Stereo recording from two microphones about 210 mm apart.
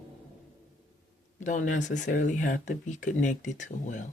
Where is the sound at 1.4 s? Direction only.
35° left (ahead or behind).